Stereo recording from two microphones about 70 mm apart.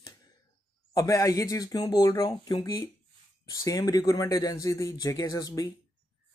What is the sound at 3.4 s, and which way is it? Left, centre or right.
Speech, left.